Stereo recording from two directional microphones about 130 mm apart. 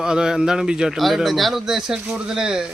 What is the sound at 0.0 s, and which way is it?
Speech, 5° right (ahead or behind).